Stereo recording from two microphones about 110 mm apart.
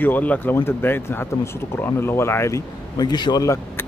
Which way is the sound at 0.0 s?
15° left (ahead or behind).